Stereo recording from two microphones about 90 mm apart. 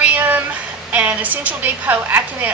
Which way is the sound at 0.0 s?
15° right (ahead or behind).